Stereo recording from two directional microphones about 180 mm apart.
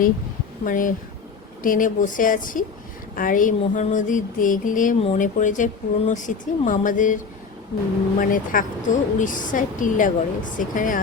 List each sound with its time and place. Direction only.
0.6 s a woman's voice: 50° left (ahead or behind)
8.2 s a woman's voice: 50° left (ahead or behind)